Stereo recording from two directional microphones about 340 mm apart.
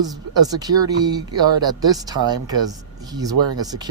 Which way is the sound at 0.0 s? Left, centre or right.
Centre.